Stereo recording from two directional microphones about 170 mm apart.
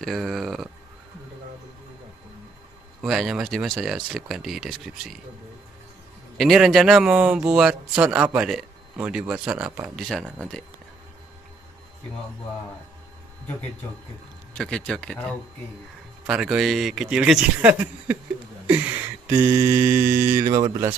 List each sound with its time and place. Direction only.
0.0 s a sound: centre (ahead or behind)
3.0 s speech: centre (ahead or behind)
6.3 s speech: centre (ahead or behind)
14.5 s speech: 5° left (ahead or behind)
16.3 s speech: 5° right (ahead or behind)
19.2 s speech: 15° right (ahead or behind)